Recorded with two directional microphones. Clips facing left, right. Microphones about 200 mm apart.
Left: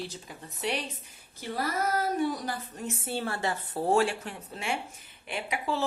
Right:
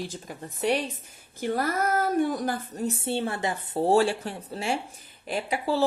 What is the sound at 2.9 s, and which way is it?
A woman's voice, 25° right (ahead or behind).